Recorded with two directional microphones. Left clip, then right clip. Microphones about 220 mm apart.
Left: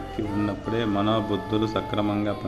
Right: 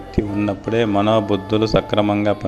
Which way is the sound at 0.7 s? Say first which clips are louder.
Right 9 dB; 35° right (ahead or behind).